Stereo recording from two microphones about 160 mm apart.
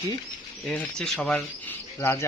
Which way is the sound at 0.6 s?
5° left (ahead or behind).